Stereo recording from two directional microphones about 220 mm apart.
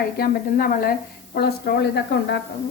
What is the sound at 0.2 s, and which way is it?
A woman's voice, 40° left (ahead or behind).